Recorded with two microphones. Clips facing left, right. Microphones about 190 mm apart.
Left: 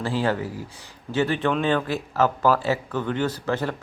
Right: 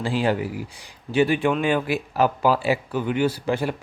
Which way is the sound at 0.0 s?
15° right (ahead or behind).